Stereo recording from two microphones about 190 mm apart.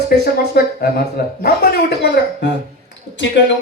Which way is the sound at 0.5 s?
55° left (ahead or behind).